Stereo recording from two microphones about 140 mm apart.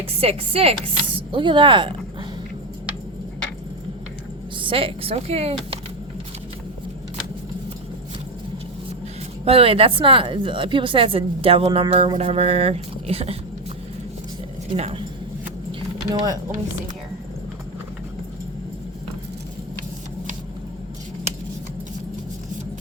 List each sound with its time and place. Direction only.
0.0 s speech: 45° right (ahead or behind)
4.6 s speech: 40° right (ahead or behind)
9.4 s speech: 45° right (ahead or behind)
14.8 s speech: 50° right (ahead or behind)
16.0 s speech: 25° right (ahead or behind)